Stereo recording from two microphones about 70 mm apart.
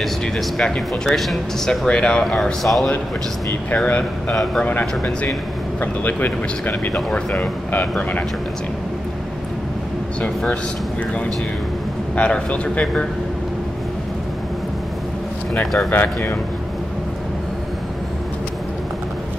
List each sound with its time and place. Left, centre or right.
0.6 s speech: centre
1.9 s speech: centre
3.7 s speech: centre
6.9 s speech: centre
7.3 s speech: left
12.2 s speech: centre
15.6 s speech: centre
15.9 s speech: left